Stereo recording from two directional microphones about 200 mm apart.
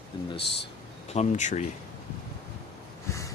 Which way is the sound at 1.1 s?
35° left (ahead or behind).